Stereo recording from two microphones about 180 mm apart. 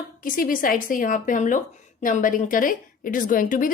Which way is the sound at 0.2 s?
50° left (ahead or behind).